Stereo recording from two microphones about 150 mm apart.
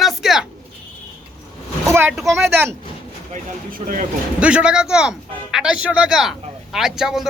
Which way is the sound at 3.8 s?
45° right (ahead or behind).